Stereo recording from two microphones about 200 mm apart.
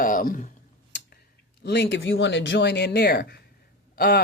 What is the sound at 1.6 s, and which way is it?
Speech, 60° left (ahead or behind).